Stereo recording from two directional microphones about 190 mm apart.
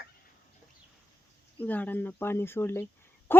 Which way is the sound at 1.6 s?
10° left (ahead or behind).